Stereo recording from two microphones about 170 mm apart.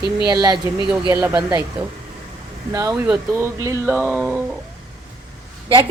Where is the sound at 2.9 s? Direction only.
5° right (ahead or behind).